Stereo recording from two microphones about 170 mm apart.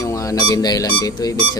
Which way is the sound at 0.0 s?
20° left (ahead or behind).